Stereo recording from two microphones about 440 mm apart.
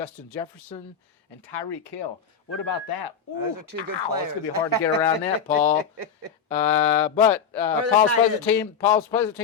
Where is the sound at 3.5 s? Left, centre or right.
Right.